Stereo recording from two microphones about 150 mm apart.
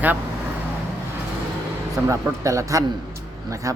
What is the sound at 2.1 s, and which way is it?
A man's voice, 20° right (ahead or behind).